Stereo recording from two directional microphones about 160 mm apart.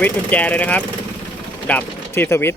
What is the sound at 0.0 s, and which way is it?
Speech, 10° left (ahead or behind).